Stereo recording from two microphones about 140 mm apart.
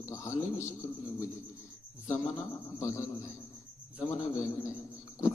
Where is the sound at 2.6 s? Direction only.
20° left (ahead or behind).